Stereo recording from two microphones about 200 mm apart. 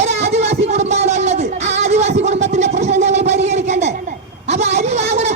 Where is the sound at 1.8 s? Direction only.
35° right (ahead or behind).